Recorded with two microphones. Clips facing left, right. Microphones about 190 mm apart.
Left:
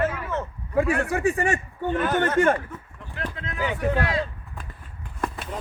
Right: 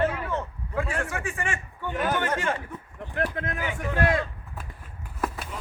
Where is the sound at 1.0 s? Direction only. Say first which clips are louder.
Left 8 dB; 35° left (ahead or behind).